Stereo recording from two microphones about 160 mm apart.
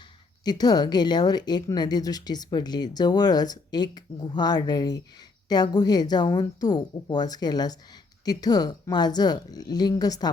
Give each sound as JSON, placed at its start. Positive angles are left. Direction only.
{"t": 0.4, "sound": "a woman's voice", "side_deg": 25}